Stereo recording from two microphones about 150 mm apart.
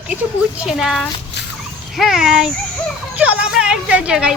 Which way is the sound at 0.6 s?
5° right (ahead or behind).